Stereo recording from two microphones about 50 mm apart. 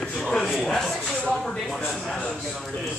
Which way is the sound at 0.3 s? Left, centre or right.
Centre.